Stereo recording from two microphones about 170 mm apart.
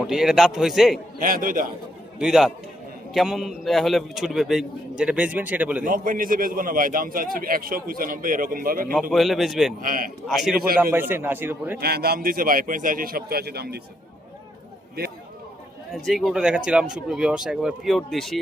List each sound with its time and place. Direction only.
0.0 s a man's voice: 5° right (ahead or behind)
1.2 s a man's voice: 55° right (ahead or behind)
2.1 s a man's voice: 5° right (ahead or behind)
5.8 s a man's voice: 55° right (ahead or behind)
9.0 s a man's voice: centre (ahead or behind)
9.8 s a man's voice: 55° right (ahead or behind)
10.2 s a man's voice: centre (ahead or behind)
11.1 s speech: 10° right (ahead or behind)
11.8 s a man's voice: 65° right (ahead or behind)
16.0 s a man's voice: centre (ahead or behind)